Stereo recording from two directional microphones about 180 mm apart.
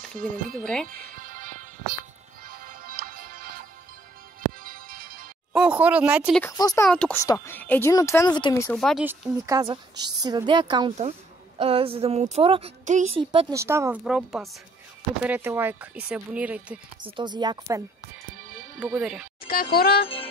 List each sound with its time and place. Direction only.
0.2 s speech: 5° left (ahead or behind)
0.8 s music: 50° right (ahead or behind)
4.6 s music: 55° right (ahead or behind)
5.5 s speech: 5° right (ahead or behind)
6.4 s speech: 20° left (ahead or behind)
6.9 s speech: 10° left (ahead or behind); by 8.6 s 25° left (ahead or behind)
8.6 s speech: centre (ahead or behind)
9.5 s a woman's voice: 20° right (ahead or behind); by 13.1 s 40° right (ahead or behind)
13.2 s a woman's voice: 25° right (ahead or behind)
13.6 s speech: 15° right (ahead or behind)
17.0 s a woman's voice: 25° right (ahead or behind)
18.8 s speech: 5° right (ahead or behind)
19.4 s speech: 55° left (ahead or behind)